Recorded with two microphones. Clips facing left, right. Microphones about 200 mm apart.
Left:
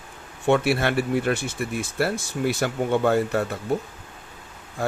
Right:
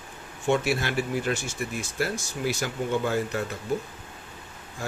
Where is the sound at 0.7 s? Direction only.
60° left (ahead or behind).